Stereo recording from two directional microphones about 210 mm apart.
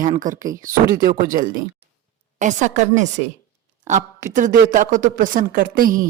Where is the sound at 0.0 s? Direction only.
40° right (ahead or behind).